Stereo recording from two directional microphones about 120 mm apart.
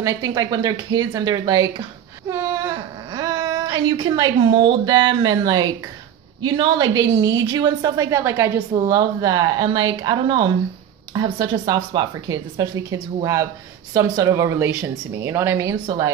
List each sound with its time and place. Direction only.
0.0 s a woman's voice: 30° right (ahead or behind)
12.3 s a woman's voice: 30° right (ahead or behind)